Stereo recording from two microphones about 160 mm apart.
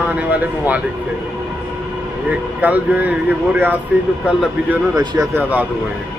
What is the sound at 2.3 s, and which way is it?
Speech, 10° right (ahead or behind).